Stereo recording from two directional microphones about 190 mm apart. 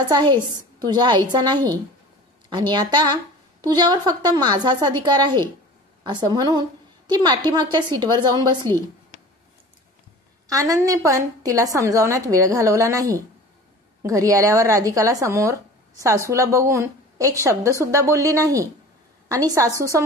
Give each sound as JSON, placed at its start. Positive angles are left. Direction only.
{"t": 0.1, "sound": "a woman's voice", "side_deg": -25}
{"t": 10.5, "sound": "speech", "side_deg": -15}